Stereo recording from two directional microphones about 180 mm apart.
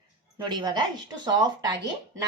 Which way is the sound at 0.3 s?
25° right (ahead or behind).